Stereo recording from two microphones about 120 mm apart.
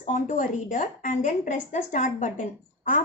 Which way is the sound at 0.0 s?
90° left.